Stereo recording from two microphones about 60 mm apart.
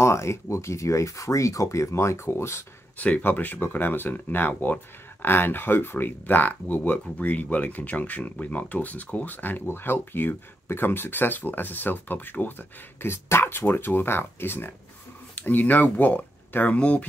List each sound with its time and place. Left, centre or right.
0.0 s speech: left
3.0 s speech: left